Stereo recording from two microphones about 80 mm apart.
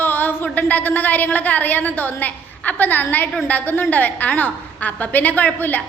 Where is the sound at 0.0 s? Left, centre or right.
Left.